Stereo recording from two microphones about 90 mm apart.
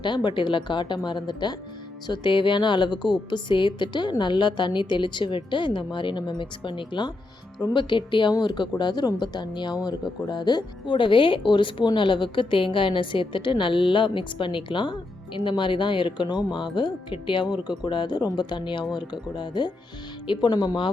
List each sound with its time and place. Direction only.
0.0 s a woman's voice: 60° left (ahead or behind)
17.5 s a woman's voice: 55° left (ahead or behind)